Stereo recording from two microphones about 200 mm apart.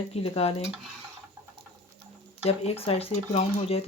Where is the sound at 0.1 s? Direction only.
30° left (ahead or behind).